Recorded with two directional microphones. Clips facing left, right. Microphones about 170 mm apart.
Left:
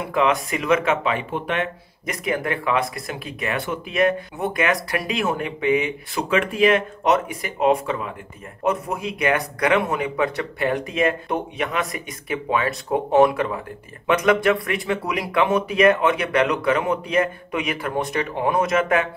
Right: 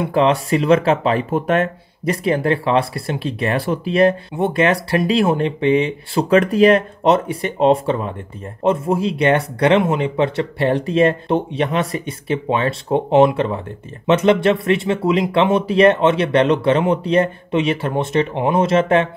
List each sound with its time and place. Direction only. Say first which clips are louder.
0.0 s speech: right 5 dB; 30° right (ahead or behind)